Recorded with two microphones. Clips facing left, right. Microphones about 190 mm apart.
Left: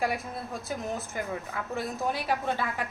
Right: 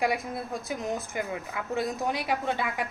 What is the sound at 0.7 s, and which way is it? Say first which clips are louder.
A woman's voice: right 1 dB; 15° right (ahead or behind).